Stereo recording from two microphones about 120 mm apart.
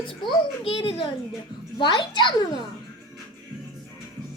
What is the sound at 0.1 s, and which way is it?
Speech, 45° left (ahead or behind).